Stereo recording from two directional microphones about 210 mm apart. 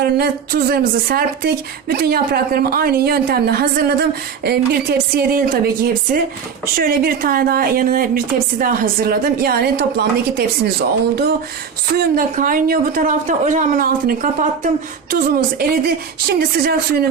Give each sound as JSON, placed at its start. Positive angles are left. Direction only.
{"t": 0.0, "sound": "a woman's voice", "side_deg": -45}